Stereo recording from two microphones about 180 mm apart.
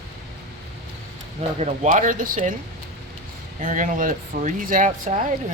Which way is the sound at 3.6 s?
45° right (ahead or behind).